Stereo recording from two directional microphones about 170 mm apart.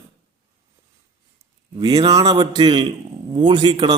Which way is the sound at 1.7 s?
25° right (ahead or behind).